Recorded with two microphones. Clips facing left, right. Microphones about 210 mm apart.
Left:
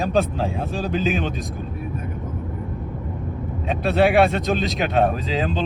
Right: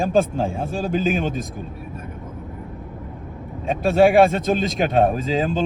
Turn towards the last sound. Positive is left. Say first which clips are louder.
# right 2 dB
turn(degrees=-45)  # may be behind; listen again after turning